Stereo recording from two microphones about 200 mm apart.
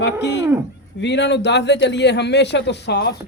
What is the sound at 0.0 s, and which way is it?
A man's voice, 60° left (ahead or behind).